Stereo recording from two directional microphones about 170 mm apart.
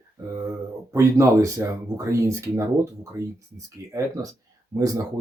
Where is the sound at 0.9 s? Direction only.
20° right (ahead or behind).